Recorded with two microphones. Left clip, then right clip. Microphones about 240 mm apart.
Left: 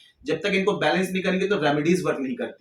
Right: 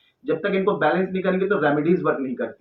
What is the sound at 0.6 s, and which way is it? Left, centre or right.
Speech, left.